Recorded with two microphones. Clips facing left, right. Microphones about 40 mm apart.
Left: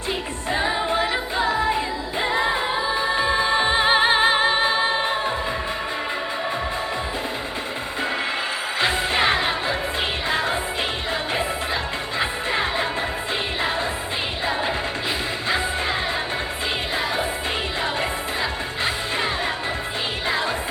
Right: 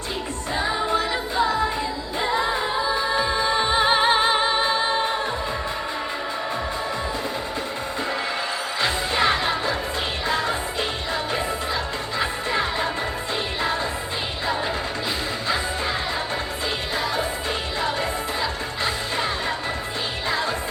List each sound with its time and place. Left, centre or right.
0.5 s music: left
8.8 s music: left
15.4 s music: centre
18.8 s music: left